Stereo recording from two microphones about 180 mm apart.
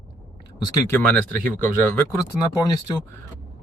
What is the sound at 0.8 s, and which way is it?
Speech, 10° left (ahead or behind).